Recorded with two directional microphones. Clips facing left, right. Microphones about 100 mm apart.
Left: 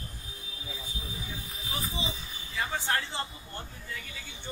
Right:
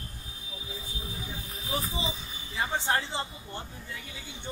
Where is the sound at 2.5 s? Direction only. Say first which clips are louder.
Right 2 dB; 20° right (ahead or behind).